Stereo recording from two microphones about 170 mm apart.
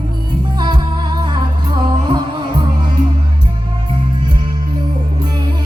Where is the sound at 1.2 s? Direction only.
25° right (ahead or behind).